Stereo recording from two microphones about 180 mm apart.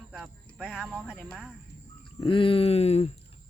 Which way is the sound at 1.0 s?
10° left (ahead or behind).